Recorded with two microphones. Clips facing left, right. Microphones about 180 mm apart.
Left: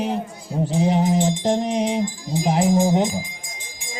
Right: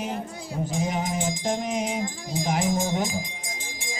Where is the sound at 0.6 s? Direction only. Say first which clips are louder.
Left 9 dB; 35° left (ahead or behind).